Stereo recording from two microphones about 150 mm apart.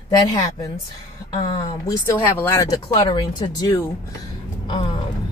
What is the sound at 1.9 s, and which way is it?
Speech, 15° left (ahead or behind).